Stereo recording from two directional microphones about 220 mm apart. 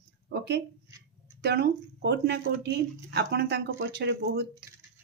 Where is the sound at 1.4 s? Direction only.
50° right (ahead or behind).